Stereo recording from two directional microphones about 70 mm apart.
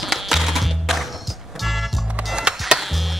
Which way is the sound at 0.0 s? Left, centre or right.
Centre.